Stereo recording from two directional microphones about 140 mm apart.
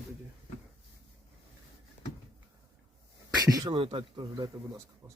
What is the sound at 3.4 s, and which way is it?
A man's voice, 30° right (ahead or behind).